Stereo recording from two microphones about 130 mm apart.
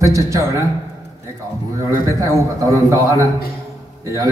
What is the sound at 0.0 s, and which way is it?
Speech, 25° right (ahead or behind).